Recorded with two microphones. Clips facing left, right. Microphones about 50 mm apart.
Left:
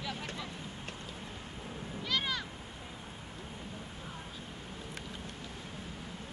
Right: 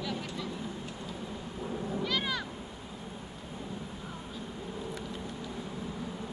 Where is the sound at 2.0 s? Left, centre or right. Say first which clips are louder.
Even; centre.